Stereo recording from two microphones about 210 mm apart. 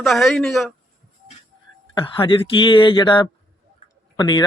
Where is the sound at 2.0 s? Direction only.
25° left (ahead or behind).